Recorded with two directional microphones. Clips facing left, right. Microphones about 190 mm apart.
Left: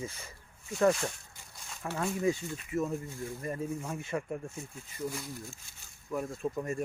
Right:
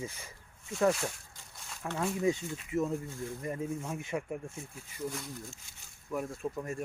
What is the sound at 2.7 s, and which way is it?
Speech, 20° right (ahead or behind).